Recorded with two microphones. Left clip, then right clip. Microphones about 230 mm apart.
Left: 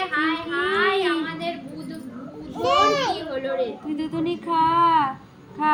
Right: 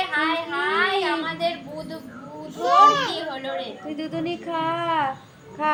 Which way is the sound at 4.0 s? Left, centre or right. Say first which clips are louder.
Left 1 dB; right.